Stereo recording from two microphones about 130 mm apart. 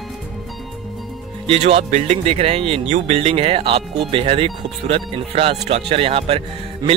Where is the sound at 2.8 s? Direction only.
60° right (ahead or behind).